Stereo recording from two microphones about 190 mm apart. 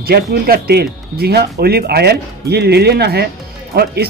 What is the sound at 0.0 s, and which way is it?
Speech, 55° right (ahead or behind).